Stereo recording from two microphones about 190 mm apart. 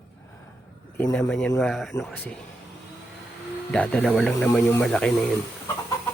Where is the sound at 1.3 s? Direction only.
5° left (ahead or behind).